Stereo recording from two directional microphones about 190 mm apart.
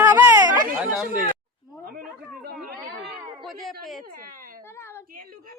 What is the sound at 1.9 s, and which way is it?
Chatter, 55° right (ahead or behind).